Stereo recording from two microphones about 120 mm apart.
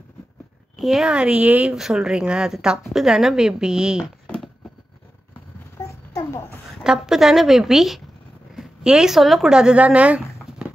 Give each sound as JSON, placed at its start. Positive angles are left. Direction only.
{"t": 0.7, "sound": "speech", "side_deg": -5}
{"t": 6.1, "sound": "a sound", "side_deg": 20}
{"t": 6.8, "sound": "speech", "side_deg": -5}